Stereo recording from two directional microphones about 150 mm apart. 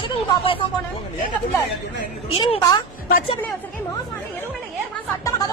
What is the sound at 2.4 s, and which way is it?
Speech, 30° left (ahead or behind).